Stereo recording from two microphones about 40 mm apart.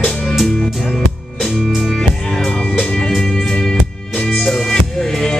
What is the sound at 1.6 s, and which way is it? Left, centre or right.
Music, centre.